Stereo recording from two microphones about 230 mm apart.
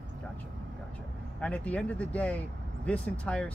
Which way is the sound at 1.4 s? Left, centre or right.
Centre.